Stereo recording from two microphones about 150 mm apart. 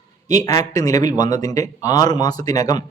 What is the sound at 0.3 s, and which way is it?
A man's voice, 25° left (ahead or behind).